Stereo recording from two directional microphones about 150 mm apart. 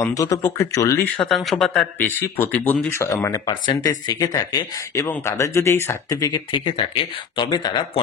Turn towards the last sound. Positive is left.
turn(degrees=30)  # may be behind; listen again after turning